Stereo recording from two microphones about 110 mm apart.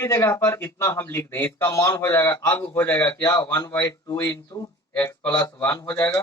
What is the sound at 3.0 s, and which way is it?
Speech, 35° left (ahead or behind).